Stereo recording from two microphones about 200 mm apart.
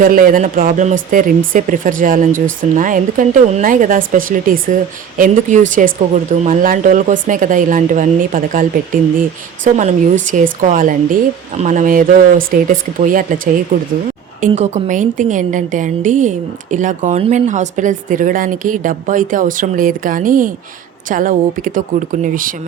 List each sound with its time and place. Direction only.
0.0 s speech: 45° right (ahead or behind)